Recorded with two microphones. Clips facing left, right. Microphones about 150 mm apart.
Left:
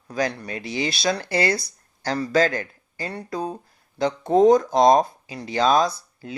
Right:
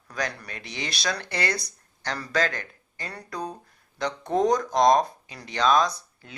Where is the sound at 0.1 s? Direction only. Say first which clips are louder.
Left 7 dB; 25° left (ahead or behind).